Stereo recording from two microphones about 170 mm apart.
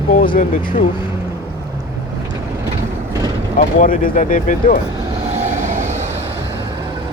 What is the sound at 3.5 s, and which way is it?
Speech, 50° left (ahead or behind).